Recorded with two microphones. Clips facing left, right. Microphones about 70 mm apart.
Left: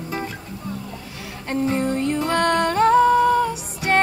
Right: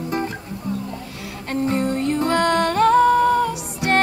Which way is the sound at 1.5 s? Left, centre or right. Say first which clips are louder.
Even; centre.